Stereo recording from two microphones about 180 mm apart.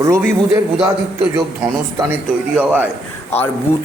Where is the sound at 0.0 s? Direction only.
15° right (ahead or behind).